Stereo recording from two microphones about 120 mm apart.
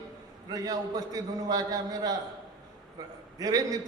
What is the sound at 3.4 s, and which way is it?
Speech, 30° right (ahead or behind).